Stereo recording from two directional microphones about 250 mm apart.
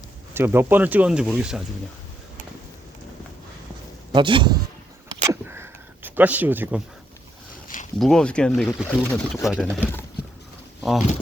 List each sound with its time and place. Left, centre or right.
0.3 s speech: centre
4.1 s speech: centre
5.2 s a sound: centre
7.9 s speech: centre
10.8 s pigeon: centre